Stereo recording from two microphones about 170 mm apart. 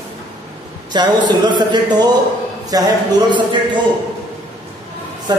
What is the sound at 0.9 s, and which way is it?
Speech, 25° right (ahead or behind).